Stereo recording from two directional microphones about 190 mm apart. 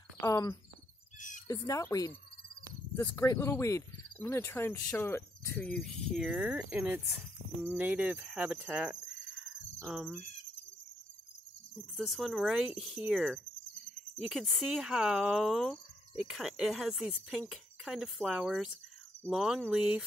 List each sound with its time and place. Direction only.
0.2 s speech: 15° left (ahead or behind); by 9.1 s 5° right (ahead or behind)
9.4 s cricket: centre (ahead or behind)
11.9 s speech: centre (ahead or behind)